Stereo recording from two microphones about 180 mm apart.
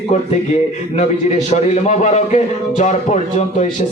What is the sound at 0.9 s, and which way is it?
A man's voice, 40° left (ahead or behind).